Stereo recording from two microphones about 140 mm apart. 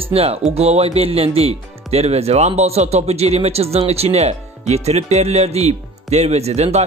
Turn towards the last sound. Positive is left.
turn(degrees=-50)  # may be behind; listen again after turning